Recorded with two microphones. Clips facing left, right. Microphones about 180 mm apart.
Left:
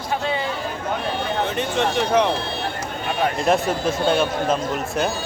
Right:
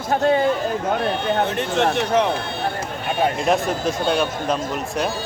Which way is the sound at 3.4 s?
Centre (ahead or behind).